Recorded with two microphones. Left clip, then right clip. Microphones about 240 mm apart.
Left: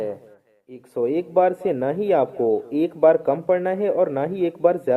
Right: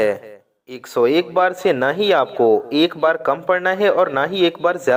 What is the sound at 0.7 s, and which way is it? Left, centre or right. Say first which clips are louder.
Speech: right 7 dB; centre.